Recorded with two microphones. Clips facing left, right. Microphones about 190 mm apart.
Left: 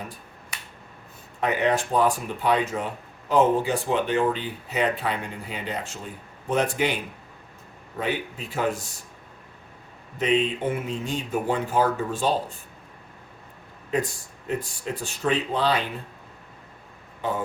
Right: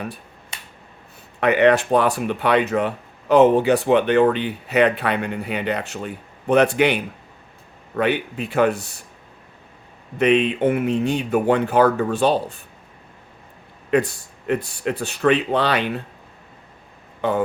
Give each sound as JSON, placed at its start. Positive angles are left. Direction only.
{"t": 1.4, "sound": "a man's voice", "side_deg": -70}
{"t": 10.2, "sound": "speech", "side_deg": -65}
{"t": 13.9, "sound": "speech", "side_deg": -65}
{"t": 17.2, "sound": "speech", "side_deg": -65}